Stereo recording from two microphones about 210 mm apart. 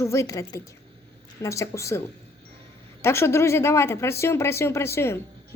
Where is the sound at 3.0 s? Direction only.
10° left (ahead or behind).